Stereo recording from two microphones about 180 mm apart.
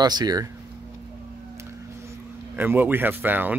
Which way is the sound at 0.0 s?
25° right (ahead or behind).